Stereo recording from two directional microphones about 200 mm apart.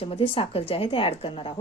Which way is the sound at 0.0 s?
25° left (ahead or behind).